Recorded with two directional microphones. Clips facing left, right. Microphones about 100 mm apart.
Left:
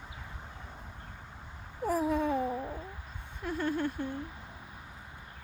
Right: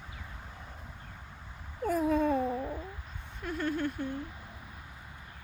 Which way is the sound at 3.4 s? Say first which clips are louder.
Left 1 dB; 25° left (ahead or behind).